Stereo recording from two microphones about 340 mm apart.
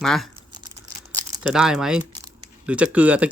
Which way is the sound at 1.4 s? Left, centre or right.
Centre.